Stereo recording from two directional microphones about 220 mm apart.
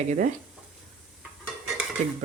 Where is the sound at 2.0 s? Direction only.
30° right (ahead or behind).